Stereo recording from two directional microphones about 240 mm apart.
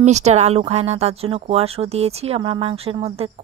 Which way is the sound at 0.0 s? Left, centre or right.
Right.